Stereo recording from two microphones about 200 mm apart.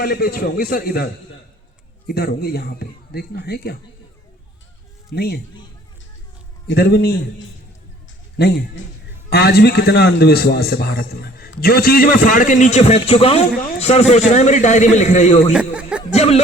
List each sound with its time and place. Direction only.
0.0 s a man's voice: 50° left (ahead or behind)
5.1 s a man's voice: 50° left (ahead or behind)
6.7 s a man's voice: 55° left (ahead or behind); by 15.5 s 35° left (ahead or behind)
15.5 s speech: 5° right (ahead or behind)
16.1 s speech: 30° left (ahead or behind)